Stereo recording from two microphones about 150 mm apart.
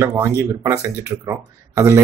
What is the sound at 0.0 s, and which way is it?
A man's voice, 15° right (ahead or behind).